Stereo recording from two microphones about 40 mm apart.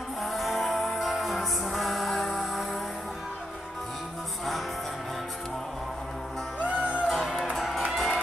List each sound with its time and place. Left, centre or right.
0.2 s music: centre
6.6 s music: right
7.1 s music: centre